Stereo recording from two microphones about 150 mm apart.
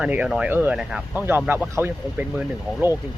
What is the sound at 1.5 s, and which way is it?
Speech, 15° right (ahead or behind).